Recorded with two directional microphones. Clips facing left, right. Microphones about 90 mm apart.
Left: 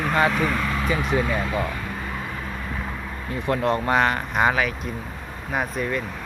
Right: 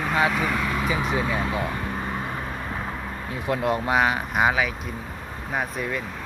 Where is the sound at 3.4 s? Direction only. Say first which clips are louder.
Left 2 dB; 5° right (ahead or behind).